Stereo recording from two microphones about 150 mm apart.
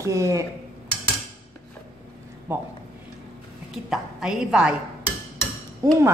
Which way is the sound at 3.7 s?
5° right (ahead or behind).